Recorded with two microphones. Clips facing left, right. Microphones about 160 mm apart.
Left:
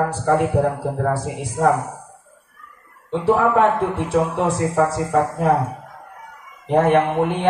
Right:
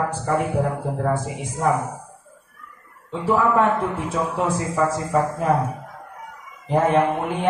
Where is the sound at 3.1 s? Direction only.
75° left (ahead or behind).